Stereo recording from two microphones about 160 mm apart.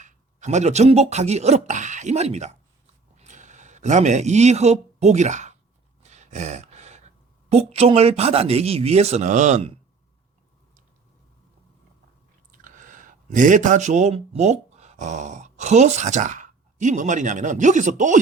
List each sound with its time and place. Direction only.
0.0 s a man's voice: 50° right (ahead or behind)
6.0 s a sound: 45° right (ahead or behind)
7.5 s speech: 40° right (ahead or behind)
12.5 s speech: 55° right (ahead or behind)